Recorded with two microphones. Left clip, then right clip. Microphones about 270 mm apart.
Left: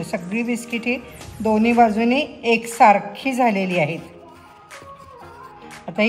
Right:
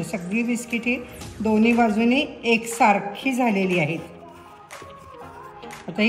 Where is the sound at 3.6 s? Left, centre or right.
Left.